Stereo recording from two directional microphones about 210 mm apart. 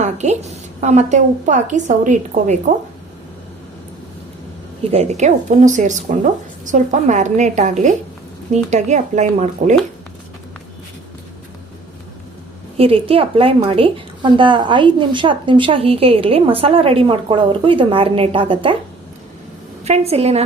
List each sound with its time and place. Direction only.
0.0 s a woman's voice: 35° right (ahead or behind)
4.9 s a woman's voice: 30° right (ahead or behind)
12.7 s a woman's voice: 30° right (ahead or behind)
19.8 s a woman's voice: 30° right (ahead or behind)